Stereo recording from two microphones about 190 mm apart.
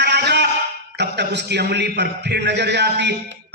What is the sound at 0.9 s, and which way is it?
A man's voice, 65° right (ahead or behind).